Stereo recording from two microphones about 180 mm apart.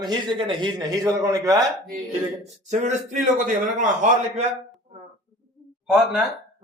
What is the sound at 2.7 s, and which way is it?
A man's voice, 40° right (ahead or behind).